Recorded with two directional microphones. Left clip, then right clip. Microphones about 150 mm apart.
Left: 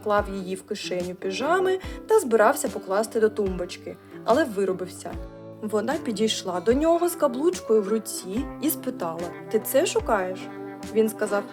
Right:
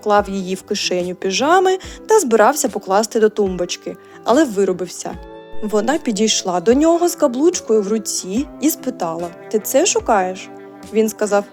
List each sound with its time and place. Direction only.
0.1 s a woman's voice: 60° right (ahead or behind)